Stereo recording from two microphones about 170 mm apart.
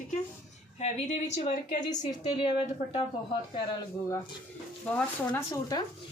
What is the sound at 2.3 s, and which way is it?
Speech, 30° left (ahead or behind).